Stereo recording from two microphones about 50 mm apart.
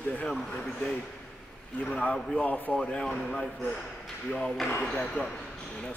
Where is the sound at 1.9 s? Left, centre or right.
Left.